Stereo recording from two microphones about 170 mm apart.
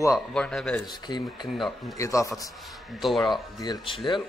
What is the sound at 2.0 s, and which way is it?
Speech, 20° left (ahead or behind).